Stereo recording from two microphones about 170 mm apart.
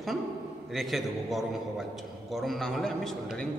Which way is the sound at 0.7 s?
Centre (ahead or behind).